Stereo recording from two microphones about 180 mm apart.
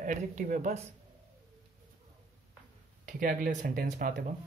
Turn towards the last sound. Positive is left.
turn(degrees=-45)  # may be behind; listen again after turning